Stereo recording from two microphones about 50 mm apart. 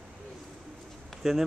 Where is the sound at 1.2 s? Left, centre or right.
Centre.